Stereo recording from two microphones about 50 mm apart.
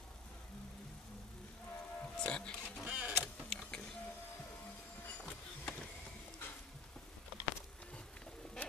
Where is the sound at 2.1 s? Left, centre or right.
Centre.